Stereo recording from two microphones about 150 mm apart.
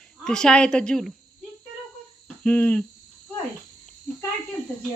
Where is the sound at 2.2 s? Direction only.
5° left (ahead or behind).